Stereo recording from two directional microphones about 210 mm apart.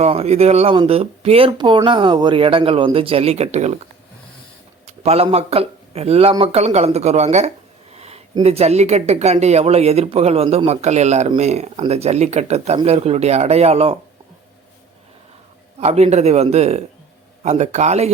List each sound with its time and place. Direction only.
0.0 s speech: 30° right (ahead or behind)
4.9 s speech: 30° right (ahead or behind)
15.8 s speech: 30° right (ahead or behind)